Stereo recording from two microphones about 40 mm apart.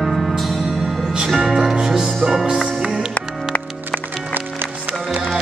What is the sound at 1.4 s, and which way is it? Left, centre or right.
Music, centre.